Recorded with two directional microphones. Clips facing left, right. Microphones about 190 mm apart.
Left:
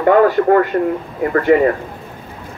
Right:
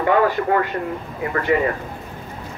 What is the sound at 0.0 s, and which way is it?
A man's voice, 45° left (ahead or behind).